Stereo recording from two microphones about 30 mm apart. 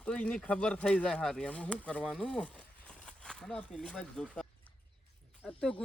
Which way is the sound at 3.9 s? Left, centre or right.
Left.